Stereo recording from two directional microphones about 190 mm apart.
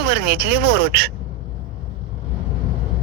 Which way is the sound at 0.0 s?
55° right (ahead or behind).